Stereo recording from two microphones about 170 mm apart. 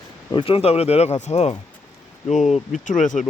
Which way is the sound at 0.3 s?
30° left (ahead or behind).